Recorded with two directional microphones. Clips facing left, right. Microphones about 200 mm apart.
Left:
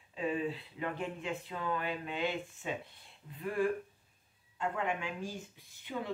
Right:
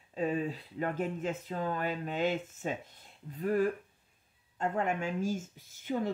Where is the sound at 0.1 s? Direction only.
40° right (ahead or behind).